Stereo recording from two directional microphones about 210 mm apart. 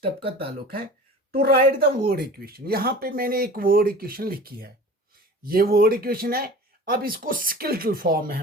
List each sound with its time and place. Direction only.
0.3 s speech: 45° right (ahead or behind)